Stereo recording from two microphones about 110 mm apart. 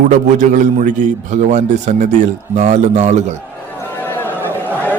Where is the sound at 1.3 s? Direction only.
90° right.